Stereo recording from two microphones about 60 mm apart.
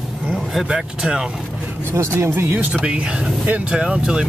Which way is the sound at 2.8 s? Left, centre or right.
Centre.